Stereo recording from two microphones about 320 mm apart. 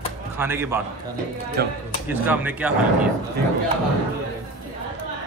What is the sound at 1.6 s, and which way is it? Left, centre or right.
Speech, right.